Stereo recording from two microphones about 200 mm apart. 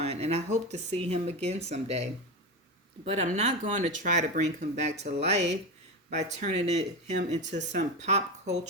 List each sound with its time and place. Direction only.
0.0 s speech: 30° right (ahead or behind)